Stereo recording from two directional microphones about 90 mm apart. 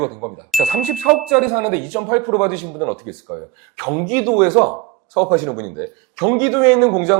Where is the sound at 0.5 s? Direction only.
10° right (ahead or behind).